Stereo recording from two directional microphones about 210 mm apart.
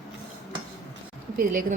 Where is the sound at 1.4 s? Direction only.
40° right (ahead or behind).